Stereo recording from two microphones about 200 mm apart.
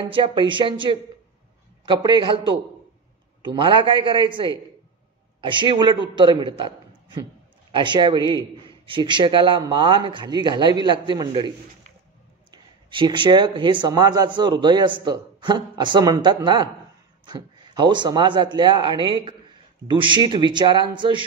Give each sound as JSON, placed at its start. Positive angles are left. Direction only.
{"t": 0.1, "sound": "a man's voice", "side_deg": -25}